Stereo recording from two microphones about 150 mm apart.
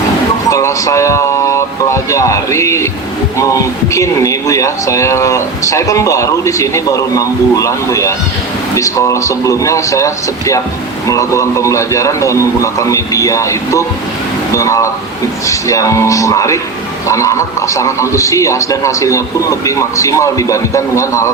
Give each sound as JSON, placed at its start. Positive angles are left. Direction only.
{"t": 0.5, "sound": "a man's voice", "side_deg": 20}